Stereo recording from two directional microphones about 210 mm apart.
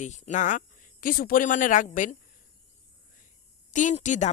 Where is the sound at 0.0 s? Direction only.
35° left (ahead or behind).